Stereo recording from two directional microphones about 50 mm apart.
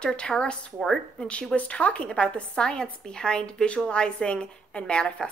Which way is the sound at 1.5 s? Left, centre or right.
Left.